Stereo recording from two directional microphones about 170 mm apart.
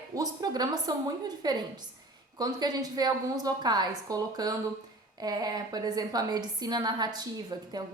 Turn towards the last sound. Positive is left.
turn(degrees=-25)  # may be behind; listen again after turning